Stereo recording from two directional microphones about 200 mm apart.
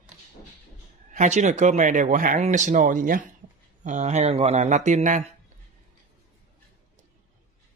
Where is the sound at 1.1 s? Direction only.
35° right (ahead or behind).